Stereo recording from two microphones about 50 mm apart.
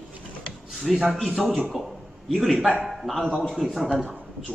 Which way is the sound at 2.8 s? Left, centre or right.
Centre.